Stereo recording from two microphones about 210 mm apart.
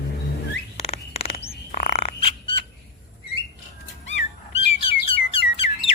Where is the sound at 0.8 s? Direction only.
30° left (ahead or behind).